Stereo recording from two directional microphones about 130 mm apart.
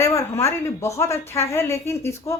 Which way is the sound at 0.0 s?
20° left (ahead or behind).